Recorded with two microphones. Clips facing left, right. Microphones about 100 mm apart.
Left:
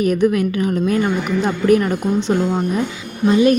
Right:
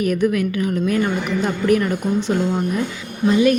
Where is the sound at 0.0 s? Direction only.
25° left (ahead or behind).